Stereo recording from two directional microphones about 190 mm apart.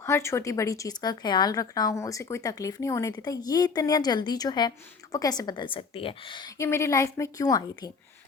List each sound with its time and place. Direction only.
0.0 s speech: 15° left (ahead or behind)